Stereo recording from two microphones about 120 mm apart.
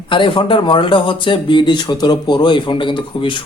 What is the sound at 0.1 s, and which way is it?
Speech, 40° left (ahead or behind).